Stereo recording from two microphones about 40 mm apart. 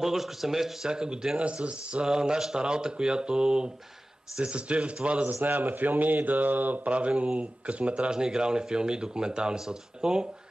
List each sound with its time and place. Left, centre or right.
0.0 s speech: centre
0.8 s speech: centre
4.4 s speech: right
5.3 s speech: right
6.9 s speech: right
8.1 s speech: centre